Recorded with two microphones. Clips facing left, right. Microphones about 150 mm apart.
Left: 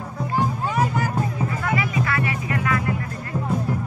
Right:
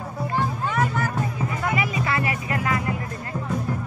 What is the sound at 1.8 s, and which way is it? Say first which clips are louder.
Music: left 1 dB; 25° right (ahead or behind).